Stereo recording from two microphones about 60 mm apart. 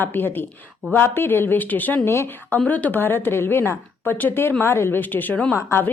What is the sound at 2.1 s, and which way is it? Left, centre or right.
Speech, left.